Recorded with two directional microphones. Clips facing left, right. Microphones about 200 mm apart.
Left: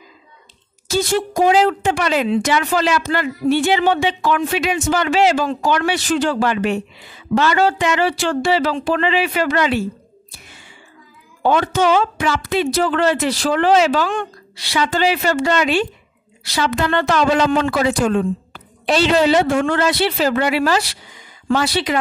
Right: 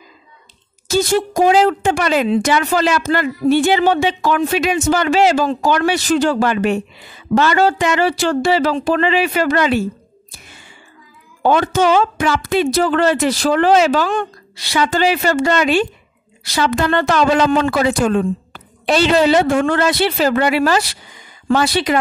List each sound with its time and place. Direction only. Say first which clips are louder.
0.8 s a woman's voice: right 3 dB; 45° right (ahead or behind)
11.4 s a woman's voice: right 2 dB; 45° right (ahead or behind)